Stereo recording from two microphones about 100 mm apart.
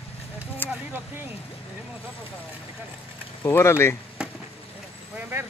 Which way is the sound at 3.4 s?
25° left (ahead or behind).